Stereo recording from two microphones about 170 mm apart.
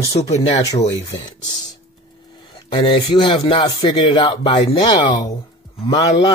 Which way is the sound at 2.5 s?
30° left (ahead or behind).